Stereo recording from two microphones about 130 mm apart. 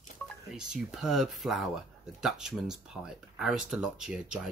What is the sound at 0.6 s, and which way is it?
Speech, 5° right (ahead or behind).